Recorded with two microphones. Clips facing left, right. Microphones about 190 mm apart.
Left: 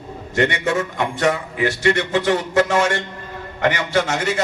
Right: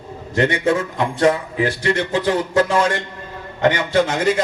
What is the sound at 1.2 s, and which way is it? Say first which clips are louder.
A man's voice: right 4 dB; 30° right (ahead or behind).